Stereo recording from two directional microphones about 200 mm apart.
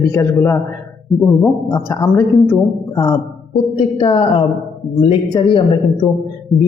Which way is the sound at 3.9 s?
25° left (ahead or behind).